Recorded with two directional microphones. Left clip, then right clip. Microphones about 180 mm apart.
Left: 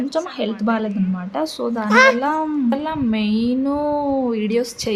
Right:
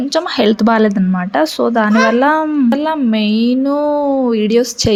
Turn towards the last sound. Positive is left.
turn(degrees=-25)  # may be behind; listen again after turning